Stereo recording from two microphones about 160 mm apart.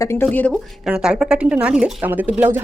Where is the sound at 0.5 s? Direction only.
5° right (ahead or behind).